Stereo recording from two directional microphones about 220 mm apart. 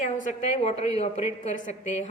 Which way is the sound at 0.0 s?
35° left (ahead or behind).